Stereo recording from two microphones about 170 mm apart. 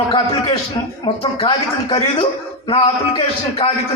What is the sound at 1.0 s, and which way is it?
A man's voice, 35° left (ahead or behind).